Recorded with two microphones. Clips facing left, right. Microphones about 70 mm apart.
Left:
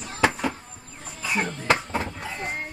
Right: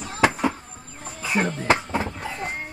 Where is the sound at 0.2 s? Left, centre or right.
Right.